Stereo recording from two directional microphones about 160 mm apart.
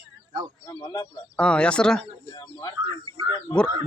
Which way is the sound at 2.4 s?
25° left (ahead or behind).